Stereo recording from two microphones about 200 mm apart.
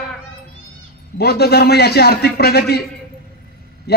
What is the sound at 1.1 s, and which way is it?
A man's voice, 55° left (ahead or behind).